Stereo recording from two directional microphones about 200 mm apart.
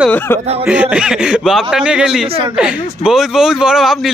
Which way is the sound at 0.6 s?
5° right (ahead or behind).